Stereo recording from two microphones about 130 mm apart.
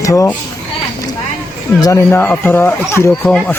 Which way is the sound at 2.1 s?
15° left (ahead or behind).